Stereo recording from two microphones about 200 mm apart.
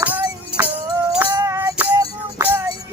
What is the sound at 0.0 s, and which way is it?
Music, 10° right (ahead or behind).